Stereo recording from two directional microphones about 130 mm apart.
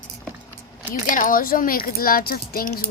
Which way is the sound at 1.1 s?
90° left.